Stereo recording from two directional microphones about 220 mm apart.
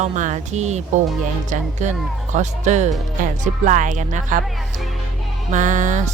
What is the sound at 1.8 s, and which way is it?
Speech, 35° right (ahead or behind).